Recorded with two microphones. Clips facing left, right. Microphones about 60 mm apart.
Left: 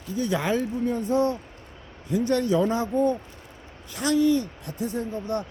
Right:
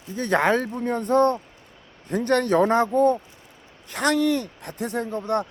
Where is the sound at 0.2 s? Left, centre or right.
Right.